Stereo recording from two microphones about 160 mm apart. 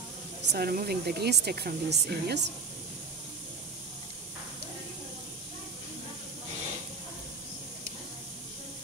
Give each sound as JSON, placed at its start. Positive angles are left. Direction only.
{"t": 0.5, "sound": "speech", "side_deg": -70}